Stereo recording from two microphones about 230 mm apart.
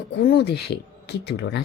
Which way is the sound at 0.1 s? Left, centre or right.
Left.